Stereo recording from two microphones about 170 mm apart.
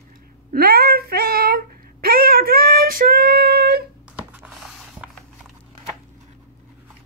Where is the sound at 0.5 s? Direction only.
60° right (ahead or behind).